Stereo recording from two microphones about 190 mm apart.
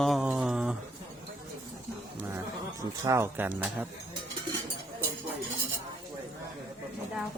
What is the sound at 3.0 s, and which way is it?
Speech, 15° right (ahead or behind).